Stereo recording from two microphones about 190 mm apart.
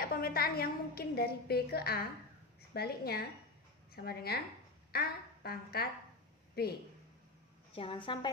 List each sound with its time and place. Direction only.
0.0 s a woman's voice: 50° left (ahead or behind)
7.7 s a woman's voice: 30° left (ahead or behind)